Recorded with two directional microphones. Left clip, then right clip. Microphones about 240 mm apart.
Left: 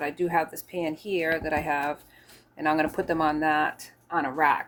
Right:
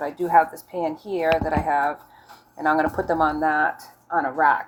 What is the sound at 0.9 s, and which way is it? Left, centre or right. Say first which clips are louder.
Speech: right 1 dB; left.